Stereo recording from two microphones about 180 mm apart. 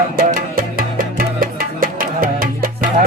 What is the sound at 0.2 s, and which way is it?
Music, 50° right (ahead or behind).